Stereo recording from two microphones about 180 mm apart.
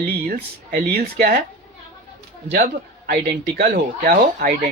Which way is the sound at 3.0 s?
55° right (ahead or behind).